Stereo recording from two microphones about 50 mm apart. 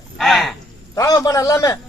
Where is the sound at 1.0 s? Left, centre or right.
Left.